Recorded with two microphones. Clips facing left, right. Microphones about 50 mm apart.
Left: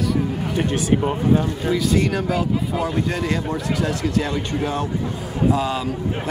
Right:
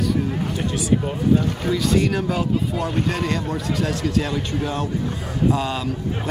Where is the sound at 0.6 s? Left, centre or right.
Left.